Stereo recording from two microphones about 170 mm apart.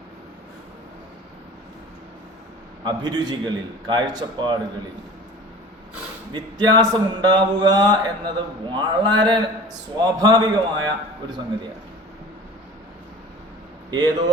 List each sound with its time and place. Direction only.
2.8 s speech: 25° right (ahead or behind)
6.3 s speech: 25° right (ahead or behind)
13.9 s speech: 25° right (ahead or behind)